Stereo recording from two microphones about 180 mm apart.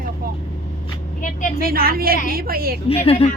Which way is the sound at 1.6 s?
55° right (ahead or behind).